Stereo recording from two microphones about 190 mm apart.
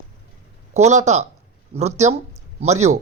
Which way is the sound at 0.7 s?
35° right (ahead or behind).